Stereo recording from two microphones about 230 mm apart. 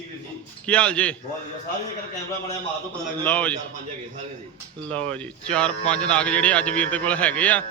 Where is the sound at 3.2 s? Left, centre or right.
Centre.